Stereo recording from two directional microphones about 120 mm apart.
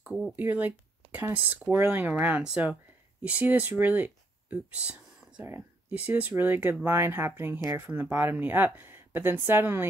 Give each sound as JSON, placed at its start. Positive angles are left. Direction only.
{"t": 0.0, "sound": "speech", "side_deg": -10}